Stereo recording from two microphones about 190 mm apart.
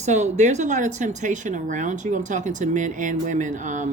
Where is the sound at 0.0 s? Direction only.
35° right (ahead or behind).